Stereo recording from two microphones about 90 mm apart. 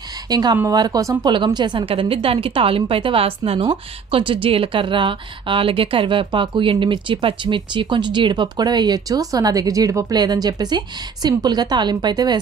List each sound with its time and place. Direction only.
0.3 s a woman's voice: 50° right (ahead or behind)
1.3 s a woman's voice: 60° right (ahead or behind); by 3.6 s 90° right
3.7 s a woman's voice: 70° right (ahead or behind); by 12.4 s 50° right (ahead or behind)